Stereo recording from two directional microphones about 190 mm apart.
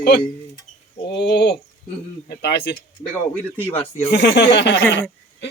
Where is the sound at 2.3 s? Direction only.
65° left (ahead or behind).